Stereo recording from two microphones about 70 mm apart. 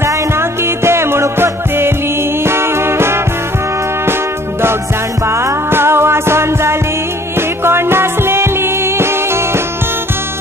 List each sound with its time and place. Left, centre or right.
0.0 s music: right